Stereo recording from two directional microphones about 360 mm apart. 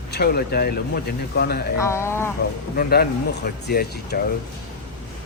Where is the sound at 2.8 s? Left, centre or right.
Left.